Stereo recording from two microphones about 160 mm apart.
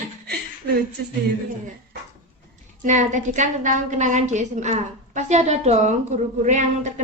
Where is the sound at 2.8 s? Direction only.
50° right (ahead or behind).